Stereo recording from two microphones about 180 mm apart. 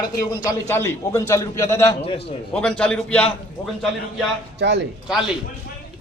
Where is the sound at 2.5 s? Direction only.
5° left (ahead or behind).